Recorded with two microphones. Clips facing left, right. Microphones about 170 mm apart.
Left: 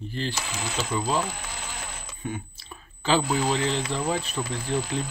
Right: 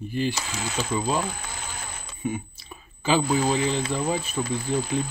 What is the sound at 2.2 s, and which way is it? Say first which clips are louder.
Speech: right 5 dB; 5° right (ahead or behind).